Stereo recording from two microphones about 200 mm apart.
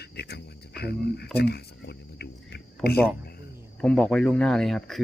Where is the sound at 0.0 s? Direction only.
55° left (ahead or behind).